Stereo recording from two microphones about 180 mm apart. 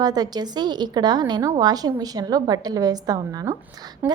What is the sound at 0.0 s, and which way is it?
A woman's voice, 20° right (ahead or behind).